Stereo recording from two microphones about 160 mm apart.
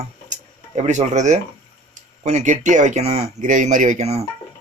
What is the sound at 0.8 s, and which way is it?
A man's voice, 45° right (ahead or behind).